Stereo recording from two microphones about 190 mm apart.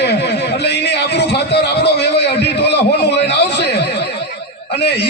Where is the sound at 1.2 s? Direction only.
60° left (ahead or behind).